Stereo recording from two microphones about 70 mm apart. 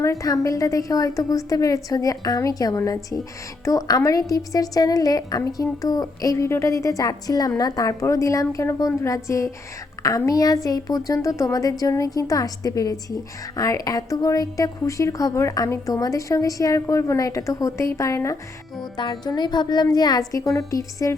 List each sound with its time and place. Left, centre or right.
0.0 s a woman's voice: left
6.3 s a woman's voice: left
18.8 s speech: left